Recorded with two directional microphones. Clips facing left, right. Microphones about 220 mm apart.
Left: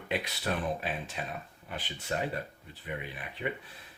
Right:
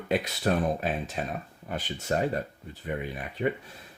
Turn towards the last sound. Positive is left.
turn(degrees=-45)  # may be behind; listen again after turning